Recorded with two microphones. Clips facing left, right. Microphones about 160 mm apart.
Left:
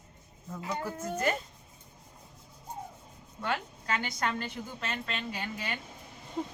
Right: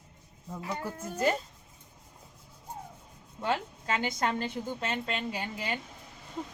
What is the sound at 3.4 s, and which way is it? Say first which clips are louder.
A woman's voice: right 3 dB; 25° right (ahead or behind).